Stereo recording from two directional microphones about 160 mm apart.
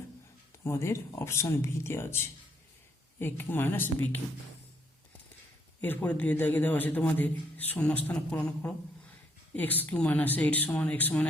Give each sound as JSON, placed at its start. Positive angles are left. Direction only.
{"t": 0.6, "sound": "a man's voice", "side_deg": 15}
{"t": 5.8, "sound": "a man's voice", "side_deg": 10}